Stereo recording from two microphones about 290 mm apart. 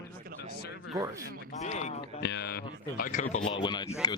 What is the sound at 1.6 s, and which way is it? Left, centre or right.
Speech, left.